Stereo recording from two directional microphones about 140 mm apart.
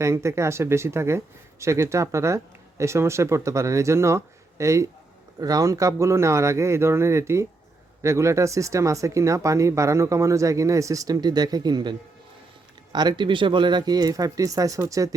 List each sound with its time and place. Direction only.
0.0 s speech: 20° right (ahead or behind)